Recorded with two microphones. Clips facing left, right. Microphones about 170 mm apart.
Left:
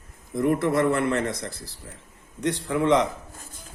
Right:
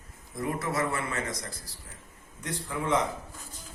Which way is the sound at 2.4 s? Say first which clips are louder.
Left 10 dB; 75° left (ahead or behind).